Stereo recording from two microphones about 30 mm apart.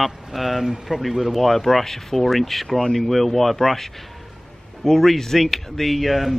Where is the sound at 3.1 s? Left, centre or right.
Centre.